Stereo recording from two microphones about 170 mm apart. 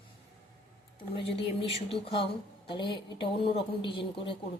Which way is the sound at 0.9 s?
30° left (ahead or behind).